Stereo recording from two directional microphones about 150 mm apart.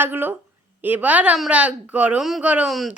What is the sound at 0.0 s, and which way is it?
A woman's voice, 15° right (ahead or behind).